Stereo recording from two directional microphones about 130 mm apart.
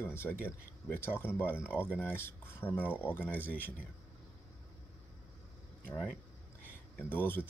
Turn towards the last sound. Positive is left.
turn(degrees=15)  # may be behind; listen again after turning